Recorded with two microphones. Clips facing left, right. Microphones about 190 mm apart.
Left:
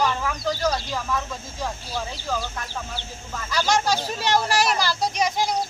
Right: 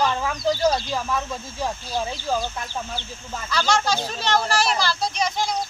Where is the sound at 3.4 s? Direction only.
15° left (ahead or behind).